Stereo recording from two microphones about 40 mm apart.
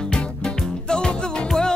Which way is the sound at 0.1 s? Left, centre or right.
Left.